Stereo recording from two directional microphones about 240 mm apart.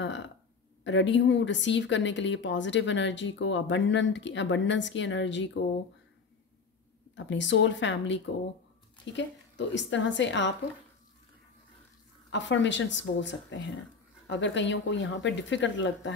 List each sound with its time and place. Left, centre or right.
0.0 s a sound: left
0.8 s speech: left
7.2 s speech: left
12.3 s speech: left